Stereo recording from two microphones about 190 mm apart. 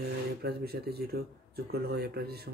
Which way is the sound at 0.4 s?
55° right (ahead or behind).